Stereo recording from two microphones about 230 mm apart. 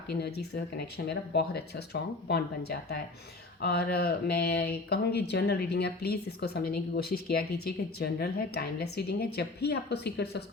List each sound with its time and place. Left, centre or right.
0.1 s speech: left